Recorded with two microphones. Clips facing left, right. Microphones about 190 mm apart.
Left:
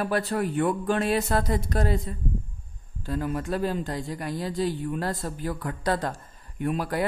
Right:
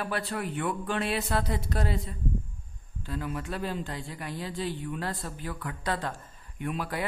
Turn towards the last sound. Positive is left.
turn(degrees=40)  # may be behind; listen again after turning